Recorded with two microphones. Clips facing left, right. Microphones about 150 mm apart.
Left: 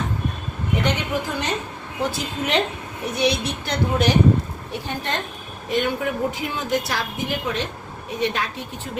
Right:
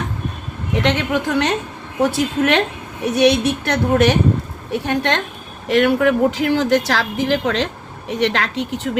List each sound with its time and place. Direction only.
0.8 s speech: 80° right
5.6 s speech: 85° right